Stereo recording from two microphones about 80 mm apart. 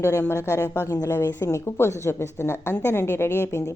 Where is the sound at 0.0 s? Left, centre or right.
Left.